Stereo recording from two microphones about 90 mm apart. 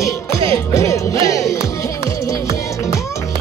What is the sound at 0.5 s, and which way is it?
Music, 35° left (ahead or behind).